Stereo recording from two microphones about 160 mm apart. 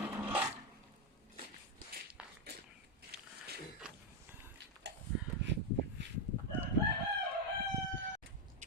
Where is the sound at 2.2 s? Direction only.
5° right (ahead or behind).